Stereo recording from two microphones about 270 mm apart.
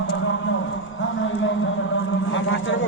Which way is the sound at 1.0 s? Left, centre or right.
Left.